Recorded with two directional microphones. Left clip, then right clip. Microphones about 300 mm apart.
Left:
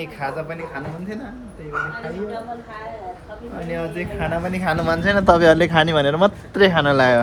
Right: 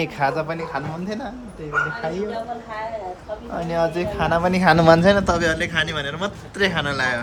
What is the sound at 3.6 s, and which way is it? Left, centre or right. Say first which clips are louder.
Speech: right 5 dB; centre.